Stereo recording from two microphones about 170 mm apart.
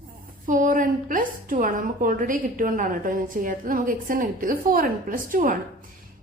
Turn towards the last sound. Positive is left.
turn(degrees=-55)  # may be behind; listen again after turning